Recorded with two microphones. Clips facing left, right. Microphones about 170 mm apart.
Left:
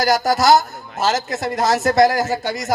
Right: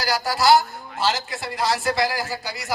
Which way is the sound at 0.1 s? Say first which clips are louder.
Left 2 dB; 40° left (ahead or behind).